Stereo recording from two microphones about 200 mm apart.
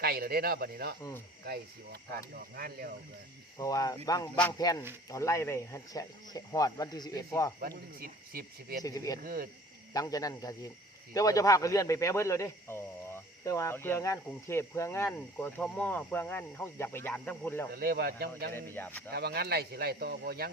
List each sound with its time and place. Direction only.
0.0 s speech: 50° right (ahead or behind)
3.6 s speech: 15° left (ahead or behind)
7.6 s speech: 50° right (ahead or behind)
8.8 s speech: 20° left (ahead or behind)
9.2 s speech: 45° right (ahead or behind)
9.9 s speech: 20° left (ahead or behind)
17.7 s speech: 50° right (ahead or behind)
18.5 s speech: 10° left (ahead or behind)
19.1 s speech: 55° right (ahead or behind)